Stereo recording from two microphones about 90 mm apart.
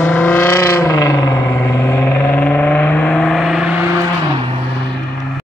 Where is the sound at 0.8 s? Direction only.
35° left (ahead or behind).